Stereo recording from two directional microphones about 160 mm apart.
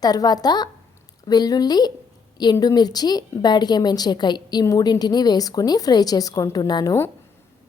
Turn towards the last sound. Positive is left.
turn(degrees=25)  # may be behind; listen again after turning